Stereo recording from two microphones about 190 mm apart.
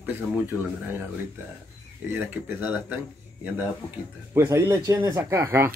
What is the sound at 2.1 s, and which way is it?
Speech, 10° right (ahead or behind).